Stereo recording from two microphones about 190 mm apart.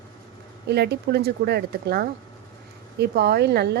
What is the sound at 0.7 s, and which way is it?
A woman's voice, 60° right (ahead or behind).